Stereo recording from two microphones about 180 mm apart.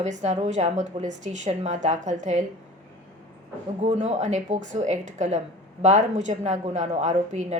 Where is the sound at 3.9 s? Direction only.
40° right (ahead or behind).